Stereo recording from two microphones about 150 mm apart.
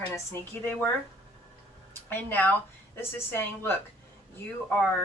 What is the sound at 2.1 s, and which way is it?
Speech, 15° left (ahead or behind).